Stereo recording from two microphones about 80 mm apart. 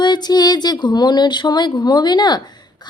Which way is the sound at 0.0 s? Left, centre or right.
Left.